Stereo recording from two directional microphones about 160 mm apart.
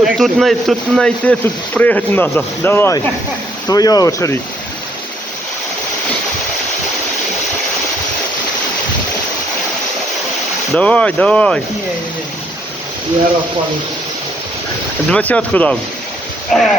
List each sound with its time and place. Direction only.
0.0 s speech: centre (ahead or behind); by 4.4 s 20° left (ahead or behind)
10.8 s speech: 10° left (ahead or behind)
15.1 s speech: 10° left (ahead or behind)
16.5 s dog: 5° left (ahead or behind)